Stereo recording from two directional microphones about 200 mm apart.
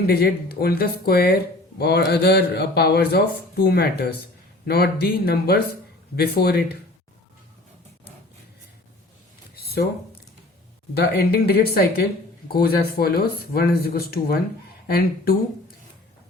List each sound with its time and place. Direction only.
0.1 s a man's voice: 50° left (ahead or behind)
10.9 s a man's voice: 50° left (ahead or behind)